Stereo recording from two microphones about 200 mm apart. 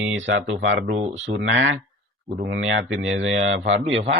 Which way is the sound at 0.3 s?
70° right (ahead or behind).